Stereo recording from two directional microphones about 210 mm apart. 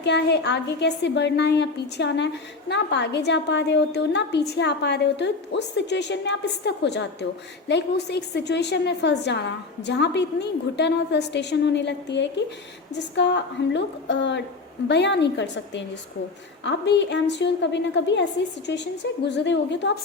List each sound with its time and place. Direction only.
0.0 s a woman's voice: 55° left (ahead or behind)